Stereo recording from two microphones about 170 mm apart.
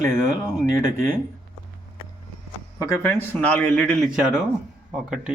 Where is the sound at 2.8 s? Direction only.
15° left (ahead or behind).